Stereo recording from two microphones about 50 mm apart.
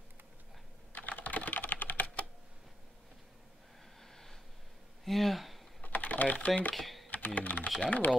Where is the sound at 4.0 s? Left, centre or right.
Centre.